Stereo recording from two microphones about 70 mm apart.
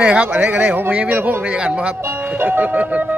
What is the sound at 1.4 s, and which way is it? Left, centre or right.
Speech, centre.